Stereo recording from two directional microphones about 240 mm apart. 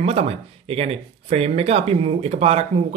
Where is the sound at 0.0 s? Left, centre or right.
Right.